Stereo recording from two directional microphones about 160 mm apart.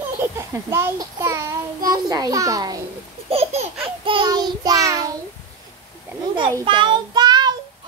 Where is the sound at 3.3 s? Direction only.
40° right (ahead or behind).